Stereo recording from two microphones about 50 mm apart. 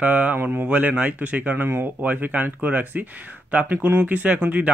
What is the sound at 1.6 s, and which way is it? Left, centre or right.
Speech, right.